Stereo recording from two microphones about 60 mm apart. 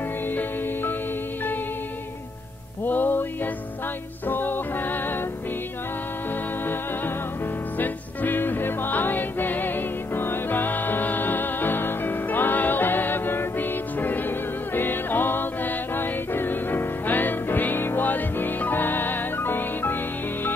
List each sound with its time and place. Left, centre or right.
2.8 s music: left
4.3 s music: left
7.8 s music: left